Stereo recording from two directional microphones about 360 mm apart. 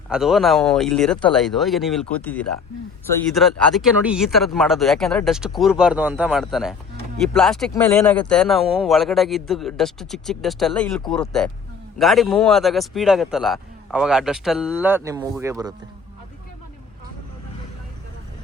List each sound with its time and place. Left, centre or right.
0.1 s speech: centre